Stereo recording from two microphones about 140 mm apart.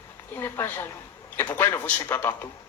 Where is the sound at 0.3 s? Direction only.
15° left (ahead or behind).